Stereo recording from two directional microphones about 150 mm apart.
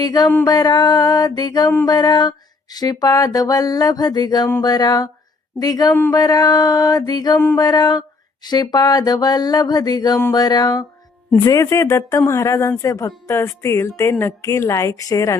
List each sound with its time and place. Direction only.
0.0 s speech: 25° left (ahead or behind)
5.9 s a sound: 15° left (ahead or behind)
6.1 s speech: 25° left (ahead or behind)